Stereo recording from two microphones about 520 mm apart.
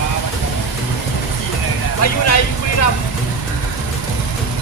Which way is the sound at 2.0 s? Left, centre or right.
Left.